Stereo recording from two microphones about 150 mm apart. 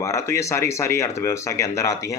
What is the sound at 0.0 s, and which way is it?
A man's voice, 20° left (ahead or behind).